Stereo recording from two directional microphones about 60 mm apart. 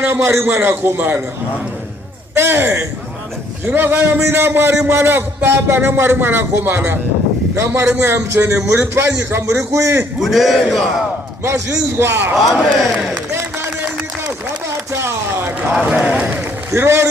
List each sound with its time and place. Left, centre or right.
0.1 s a man's voice: right
2.3 s a man's voice: right
7.5 s a man's voice: right
10.2 s speech: centre
11.4 s a man's voice: right
12.4 s speech: centre
13.3 s speech: right
14.9 s a sound: right
16.1 s run: right
16.7 s a man's voice: right